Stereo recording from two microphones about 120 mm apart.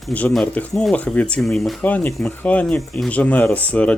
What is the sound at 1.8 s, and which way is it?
Speech, 15° left (ahead or behind).